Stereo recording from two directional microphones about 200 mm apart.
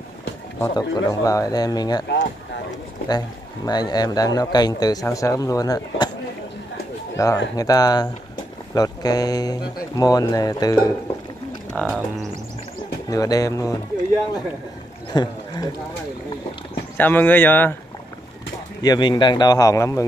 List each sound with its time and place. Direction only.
0.6 s a man's voice: 15° left (ahead or behind)
2.0 s speech: 55° left (ahead or behind)
3.1 s a man's voice: 20° left (ahead or behind)
7.2 s a man's voice: 15° left (ahead or behind)
11.7 s speech: centre (ahead or behind)
13.1 s speech: 15° left (ahead or behind)
15.1 s speech: 20° left (ahead or behind)
16.9 s speech: 10° left (ahead or behind)
18.8 s a man's voice: 20° left (ahead or behind)